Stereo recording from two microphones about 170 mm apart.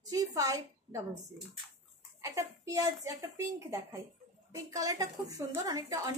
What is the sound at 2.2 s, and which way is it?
A woman's voice, 20° right (ahead or behind).